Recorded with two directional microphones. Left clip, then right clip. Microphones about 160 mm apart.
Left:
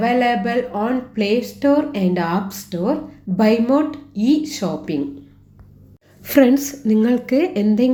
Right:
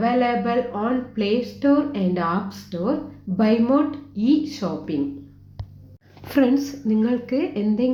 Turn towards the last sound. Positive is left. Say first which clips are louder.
# left 5 dB
turn(degrees=25)  # may be behind; listen again after turning